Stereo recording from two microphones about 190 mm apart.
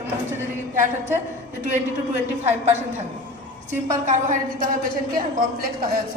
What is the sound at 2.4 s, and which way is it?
Speech, 35° right (ahead or behind).